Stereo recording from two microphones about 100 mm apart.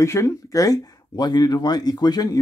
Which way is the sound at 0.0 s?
30° left (ahead or behind).